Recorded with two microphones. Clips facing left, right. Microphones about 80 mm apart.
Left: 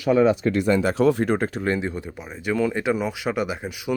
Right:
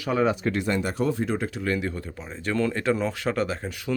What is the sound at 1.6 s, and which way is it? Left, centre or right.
Speech, left.